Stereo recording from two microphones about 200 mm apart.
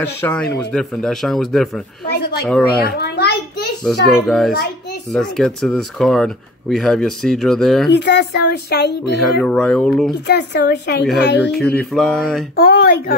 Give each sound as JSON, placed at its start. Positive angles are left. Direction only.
{"t": 0.0, "sound": "speech", "side_deg": 10}
{"t": 2.0, "sound": "a child's voice", "side_deg": 55}
{"t": 3.8, "sound": "speech", "side_deg": 0}
{"t": 7.9, "sound": "speech", "side_deg": 55}
{"t": 9.2, "sound": "speech", "side_deg": 5}
{"t": 10.2, "sound": "speech", "side_deg": 55}
{"t": 11.9, "sound": "speech", "side_deg": 0}
{"t": 12.5, "sound": "speech", "side_deg": 50}